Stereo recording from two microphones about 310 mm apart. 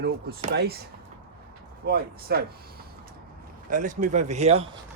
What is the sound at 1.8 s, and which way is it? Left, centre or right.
Speech, right.